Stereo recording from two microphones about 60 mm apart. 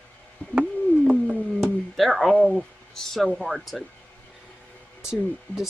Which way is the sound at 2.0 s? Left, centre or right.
Centre.